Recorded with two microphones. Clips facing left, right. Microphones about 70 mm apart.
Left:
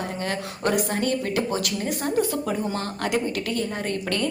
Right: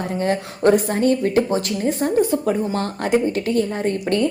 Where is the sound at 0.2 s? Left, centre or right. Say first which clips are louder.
Right 11 dB; right.